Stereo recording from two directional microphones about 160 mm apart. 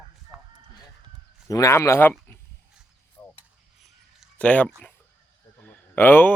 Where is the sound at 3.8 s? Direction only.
5° left (ahead or behind).